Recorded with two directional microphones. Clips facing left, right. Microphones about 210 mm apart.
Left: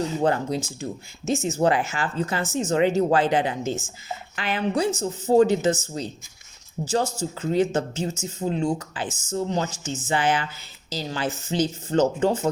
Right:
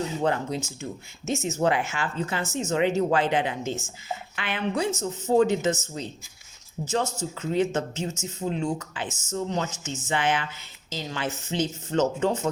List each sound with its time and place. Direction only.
0.2 s speech: 35° left (ahead or behind)